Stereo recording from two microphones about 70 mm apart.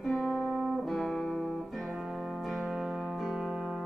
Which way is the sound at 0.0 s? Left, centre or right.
Centre.